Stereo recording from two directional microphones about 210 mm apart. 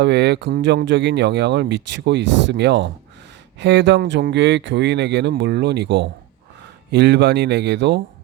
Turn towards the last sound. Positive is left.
turn(degrees=-55)  # may be behind; listen again after turning